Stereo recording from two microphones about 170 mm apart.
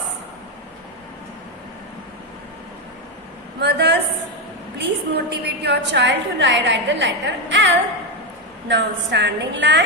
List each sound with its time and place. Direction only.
3.6 s a woman's voice: 80° right